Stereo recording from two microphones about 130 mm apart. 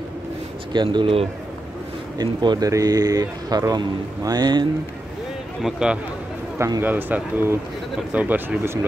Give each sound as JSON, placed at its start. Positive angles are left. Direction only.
{"t": 0.7, "sound": "speech", "side_deg": -40}
{"t": 5.6, "sound": "a man's voice", "side_deg": -5}
{"t": 6.6, "sound": "speech", "side_deg": -20}